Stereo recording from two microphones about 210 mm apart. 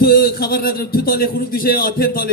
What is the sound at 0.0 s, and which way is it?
Speech, 45° left (ahead or behind).